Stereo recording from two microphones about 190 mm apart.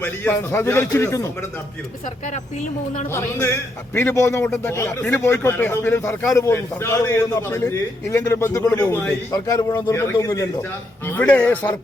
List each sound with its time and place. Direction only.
0.0 s a man's voice: 15° left (ahead or behind)
2.2 s speech: 40° left (ahead or behind)
3.1 s a man's voice: 15° left (ahead or behind)